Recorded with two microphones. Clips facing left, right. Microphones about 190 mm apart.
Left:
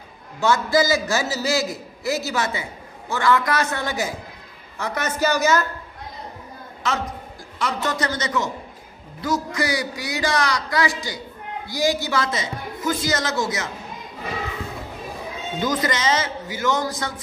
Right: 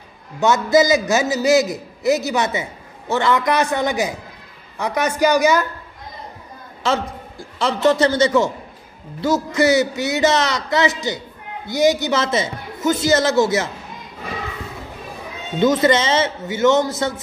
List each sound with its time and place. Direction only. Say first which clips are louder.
0.4 s a man's voice: right 4 dB; 20° right (ahead or behind)
6.8 s a man's voice: right 5 dB; 30° right (ahead or behind)
15.6 s a man's voice: right 8 dB; 25° right (ahead or behind)